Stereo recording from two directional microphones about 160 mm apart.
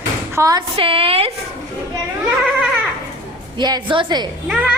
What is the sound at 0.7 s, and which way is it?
Speech, 35° right (ahead or behind).